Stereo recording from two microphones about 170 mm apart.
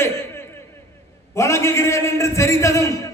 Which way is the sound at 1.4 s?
15° left (ahead or behind).